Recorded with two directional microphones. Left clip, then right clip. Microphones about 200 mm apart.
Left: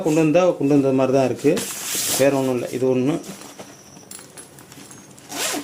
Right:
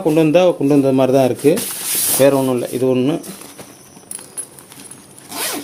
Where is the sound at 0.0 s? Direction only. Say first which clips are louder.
Right 4 dB; 25° right (ahead or behind).